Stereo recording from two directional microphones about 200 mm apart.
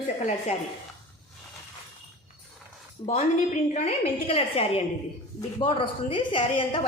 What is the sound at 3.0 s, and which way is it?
A woman's voice, 25° left (ahead or behind).